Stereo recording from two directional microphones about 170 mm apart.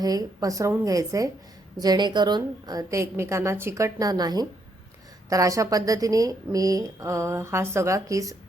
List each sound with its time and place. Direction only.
0.0 s a woman's voice: 20° right (ahead or behind)